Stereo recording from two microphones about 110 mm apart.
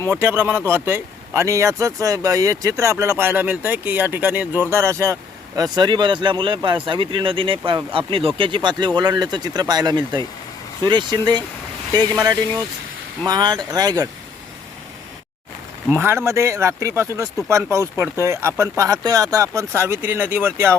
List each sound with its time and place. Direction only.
0.2 s speech: 20° right (ahead or behind)
5.5 s speech: 40° right (ahead or behind)
16.0 s speech: 20° right (ahead or behind)